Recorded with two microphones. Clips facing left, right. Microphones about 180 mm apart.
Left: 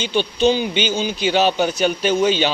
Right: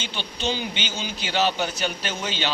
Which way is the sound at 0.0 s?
15° left (ahead or behind).